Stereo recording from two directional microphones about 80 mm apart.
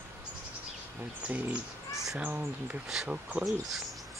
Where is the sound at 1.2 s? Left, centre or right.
Centre.